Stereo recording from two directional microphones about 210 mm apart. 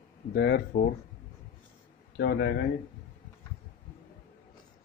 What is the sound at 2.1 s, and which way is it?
Speech, 50° left (ahead or behind).